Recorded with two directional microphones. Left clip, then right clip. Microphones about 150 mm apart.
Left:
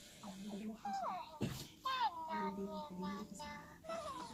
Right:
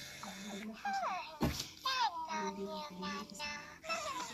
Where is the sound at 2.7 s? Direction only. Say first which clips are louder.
Right 4 dB; 30° right (ahead or behind).